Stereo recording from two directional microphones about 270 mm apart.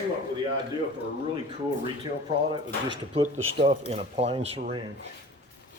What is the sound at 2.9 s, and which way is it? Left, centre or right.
Speech, centre.